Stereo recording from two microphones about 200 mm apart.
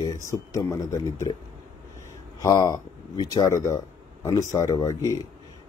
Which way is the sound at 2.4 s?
15° left (ahead or behind).